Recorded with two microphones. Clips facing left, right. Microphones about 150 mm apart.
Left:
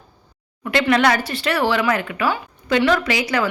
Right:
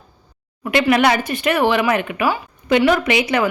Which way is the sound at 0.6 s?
15° right (ahead or behind).